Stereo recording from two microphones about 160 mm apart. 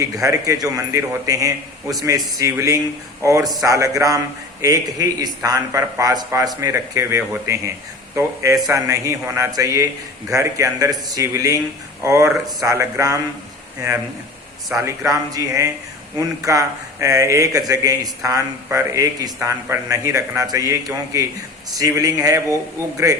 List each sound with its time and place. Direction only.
0.0 s a man's voice: 20° right (ahead or behind)
14.8 s a man's voice: 20° right (ahead or behind)